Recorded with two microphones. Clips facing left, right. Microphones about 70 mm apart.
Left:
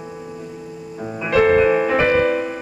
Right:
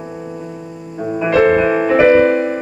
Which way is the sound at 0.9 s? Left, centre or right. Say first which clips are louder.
Right 4 dB; centre.